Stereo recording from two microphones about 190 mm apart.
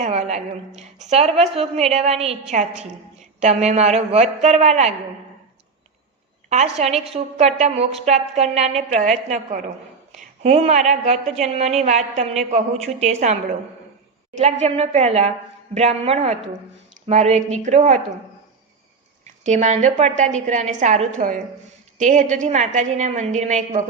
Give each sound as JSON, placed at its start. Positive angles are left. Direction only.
{"t": 0.0, "sound": "a woman's voice", "side_deg": -35}
{"t": 6.5, "sound": "a woman's voice", "side_deg": -35}
{"t": 14.6, "sound": "a woman's voice", "side_deg": -35}
{"t": 19.2, "sound": "a woman's voice", "side_deg": -40}